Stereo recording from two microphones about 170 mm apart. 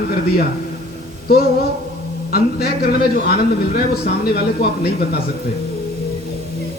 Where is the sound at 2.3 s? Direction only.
65° left (ahead or behind).